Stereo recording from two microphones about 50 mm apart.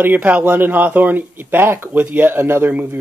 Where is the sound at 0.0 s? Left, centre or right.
Right.